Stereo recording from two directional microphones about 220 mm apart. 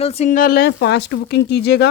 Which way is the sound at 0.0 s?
30° left (ahead or behind).